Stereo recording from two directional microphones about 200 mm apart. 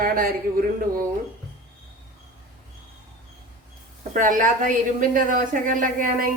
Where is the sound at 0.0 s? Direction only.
45° right (ahead or behind).